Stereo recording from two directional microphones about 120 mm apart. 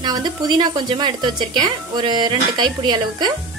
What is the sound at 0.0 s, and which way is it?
Speech, 35° right (ahead or behind).